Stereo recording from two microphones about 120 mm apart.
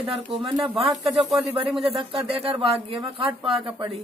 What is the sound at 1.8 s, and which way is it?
Speech, 50° right (ahead or behind).